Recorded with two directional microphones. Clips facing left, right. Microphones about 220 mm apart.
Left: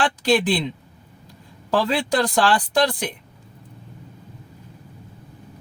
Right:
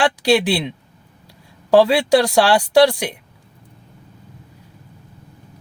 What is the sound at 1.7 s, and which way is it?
Speech, 10° right (ahead or behind).